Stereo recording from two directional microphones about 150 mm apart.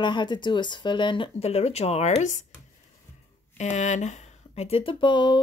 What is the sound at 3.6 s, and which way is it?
Speech, 50° left (ahead or behind).